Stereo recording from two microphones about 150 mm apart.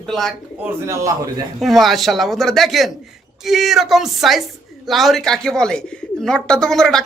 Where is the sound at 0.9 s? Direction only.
20° right (ahead or behind).